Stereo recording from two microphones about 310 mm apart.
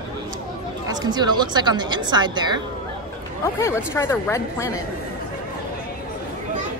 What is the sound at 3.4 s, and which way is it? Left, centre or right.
A woman's voice, centre.